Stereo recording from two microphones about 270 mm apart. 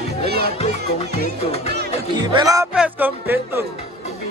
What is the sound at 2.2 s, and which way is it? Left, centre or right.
Speech, centre.